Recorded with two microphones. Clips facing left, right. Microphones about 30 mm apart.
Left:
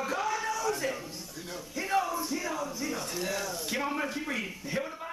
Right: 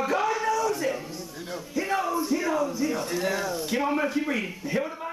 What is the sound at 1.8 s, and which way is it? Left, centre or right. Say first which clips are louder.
Music: right 2 dB; centre.